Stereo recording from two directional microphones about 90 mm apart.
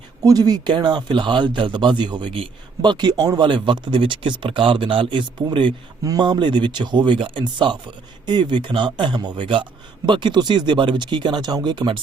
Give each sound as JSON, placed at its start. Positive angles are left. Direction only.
{"t": 0.2, "sound": "speech", "side_deg": -45}
{"t": 6.0, "sound": "speech", "side_deg": -45}